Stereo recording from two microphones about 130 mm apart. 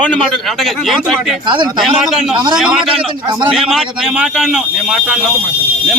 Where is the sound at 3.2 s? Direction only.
35° right (ahead or behind).